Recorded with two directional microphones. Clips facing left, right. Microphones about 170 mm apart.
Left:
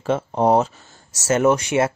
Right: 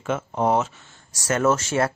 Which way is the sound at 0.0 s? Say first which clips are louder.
Left 4 dB; 35° left (ahead or behind).